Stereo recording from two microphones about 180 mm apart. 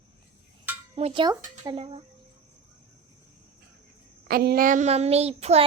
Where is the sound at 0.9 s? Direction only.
35° right (ahead or behind).